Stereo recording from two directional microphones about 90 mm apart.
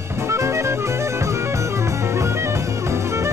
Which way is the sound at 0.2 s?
30° right (ahead or behind).